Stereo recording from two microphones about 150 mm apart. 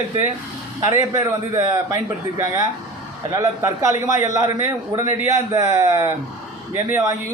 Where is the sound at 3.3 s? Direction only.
20° right (ahead or behind).